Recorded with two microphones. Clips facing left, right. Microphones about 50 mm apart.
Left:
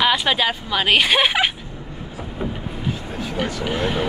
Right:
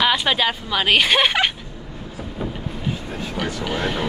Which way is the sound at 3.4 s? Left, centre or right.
Centre.